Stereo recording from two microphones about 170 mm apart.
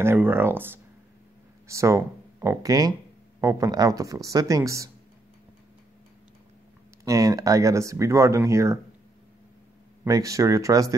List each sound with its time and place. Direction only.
0.0 s speech: 15° right (ahead or behind)
7.1 s speech: 20° right (ahead or behind)
10.0 s speech: 20° right (ahead or behind)